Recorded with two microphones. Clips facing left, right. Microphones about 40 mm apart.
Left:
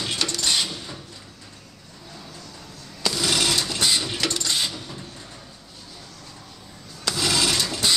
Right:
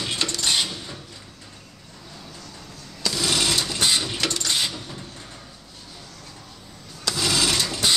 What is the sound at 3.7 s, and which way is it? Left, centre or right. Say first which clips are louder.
Sewing machine: right 2 dB; right.